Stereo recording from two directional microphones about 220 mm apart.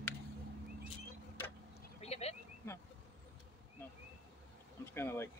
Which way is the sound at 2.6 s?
10° left (ahead or behind).